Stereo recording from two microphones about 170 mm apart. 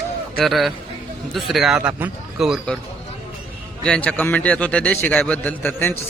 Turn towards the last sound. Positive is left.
turn(degrees=10)  # may be behind; listen again after turning